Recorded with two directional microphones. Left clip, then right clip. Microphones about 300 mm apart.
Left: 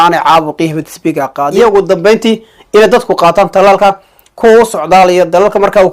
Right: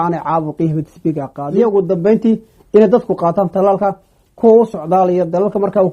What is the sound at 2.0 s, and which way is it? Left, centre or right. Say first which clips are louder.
Speech: left 6 dB; centre.